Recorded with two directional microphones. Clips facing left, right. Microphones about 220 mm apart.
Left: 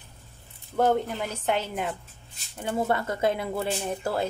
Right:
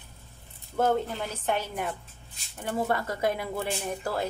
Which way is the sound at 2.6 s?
25° left (ahead or behind).